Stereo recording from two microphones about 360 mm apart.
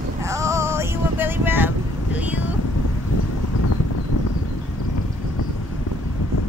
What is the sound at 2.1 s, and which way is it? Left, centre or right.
Vehicle, centre.